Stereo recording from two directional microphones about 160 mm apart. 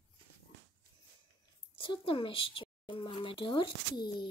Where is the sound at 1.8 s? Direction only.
35° left (ahead or behind).